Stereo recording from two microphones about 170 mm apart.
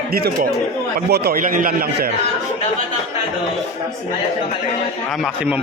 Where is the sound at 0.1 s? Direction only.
65° right (ahead or behind).